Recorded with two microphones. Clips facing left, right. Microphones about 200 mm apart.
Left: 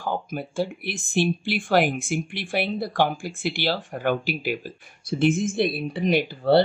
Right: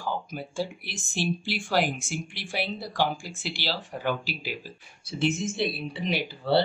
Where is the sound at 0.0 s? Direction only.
55° left (ahead or behind).